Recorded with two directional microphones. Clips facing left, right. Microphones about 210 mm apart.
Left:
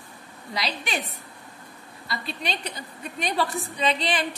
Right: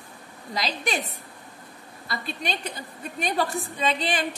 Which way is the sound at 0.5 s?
45° right (ahead or behind).